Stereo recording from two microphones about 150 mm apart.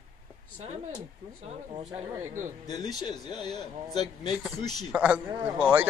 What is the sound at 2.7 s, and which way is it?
Speech, 25° left (ahead or behind).